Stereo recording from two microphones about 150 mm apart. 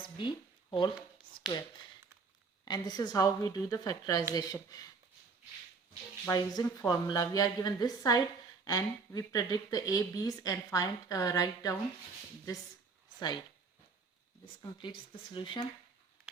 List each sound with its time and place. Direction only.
0.0 s a sound: 35° left (ahead or behind)
2.6 s speech: 25° left (ahead or behind)
6.3 s speech: 25° left (ahead or behind)
13.1 s speech: 25° left (ahead or behind)
14.6 s speech: 35° left (ahead or behind)